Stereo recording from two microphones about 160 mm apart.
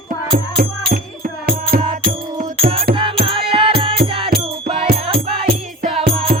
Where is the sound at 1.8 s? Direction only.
30° right (ahead or behind).